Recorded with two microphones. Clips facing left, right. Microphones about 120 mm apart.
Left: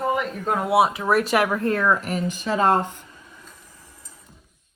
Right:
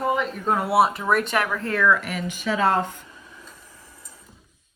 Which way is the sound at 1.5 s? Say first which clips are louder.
Left 4 dB; 25° left (ahead or behind).